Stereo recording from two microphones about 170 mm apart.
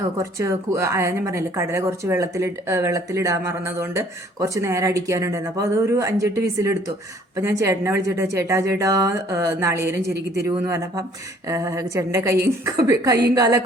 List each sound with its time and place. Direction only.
0.2 s a woman's voice: 15° right (ahead or behind)